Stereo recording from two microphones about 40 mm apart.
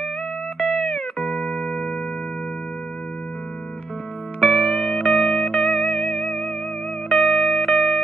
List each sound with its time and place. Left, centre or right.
0.6 s music: centre
1.3 s music: left
4.4 s music: centre